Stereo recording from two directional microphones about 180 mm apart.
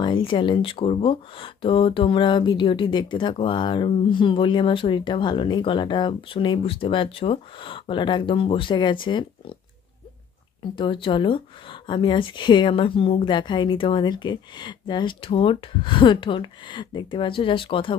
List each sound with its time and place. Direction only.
0.0 s speech: 30° left (ahead or behind)
10.8 s speech: 30° left (ahead or behind)